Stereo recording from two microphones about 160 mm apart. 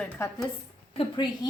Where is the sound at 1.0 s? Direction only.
30° left (ahead or behind).